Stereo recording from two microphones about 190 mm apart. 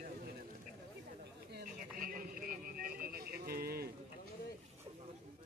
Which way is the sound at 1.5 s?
50° right (ahead or behind).